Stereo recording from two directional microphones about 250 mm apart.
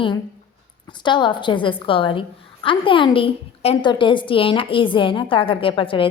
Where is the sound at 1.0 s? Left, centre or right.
Centre.